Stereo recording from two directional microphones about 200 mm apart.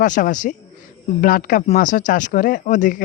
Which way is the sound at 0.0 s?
40° left (ahead or behind).